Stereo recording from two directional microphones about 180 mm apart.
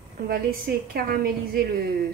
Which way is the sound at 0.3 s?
55° right (ahead or behind).